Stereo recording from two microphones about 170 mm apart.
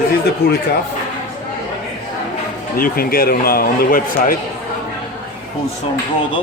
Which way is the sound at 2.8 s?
60° left (ahead or behind).